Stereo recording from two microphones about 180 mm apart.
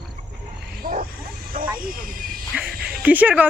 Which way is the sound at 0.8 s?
50° right (ahead or behind).